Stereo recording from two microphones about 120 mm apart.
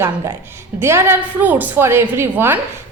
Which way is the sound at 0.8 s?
20° right (ahead or behind).